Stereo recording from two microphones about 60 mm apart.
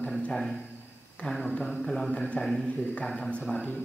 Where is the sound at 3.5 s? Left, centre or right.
Left.